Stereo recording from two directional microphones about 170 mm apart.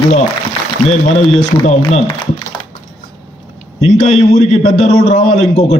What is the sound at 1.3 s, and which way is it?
Speech, 40° left (ahead or behind).